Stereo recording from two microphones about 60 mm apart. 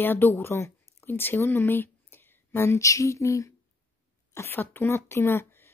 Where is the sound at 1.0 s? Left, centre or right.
Left.